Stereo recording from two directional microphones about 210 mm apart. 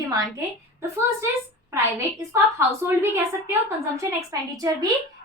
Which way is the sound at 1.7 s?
10° right (ahead or behind).